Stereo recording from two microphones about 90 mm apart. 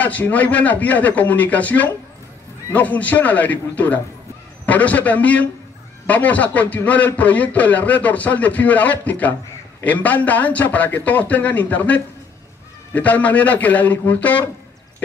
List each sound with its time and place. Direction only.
0.0 s a man's voice: 15° left (ahead or behind)